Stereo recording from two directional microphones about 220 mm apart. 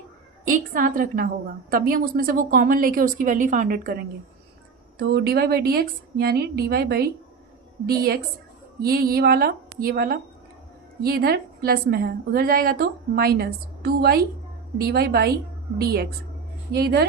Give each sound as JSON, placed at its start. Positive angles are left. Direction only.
{"t": 0.4, "sound": "a woman's voice", "side_deg": -40}
{"t": 4.9, "sound": "a woman's voice", "side_deg": -45}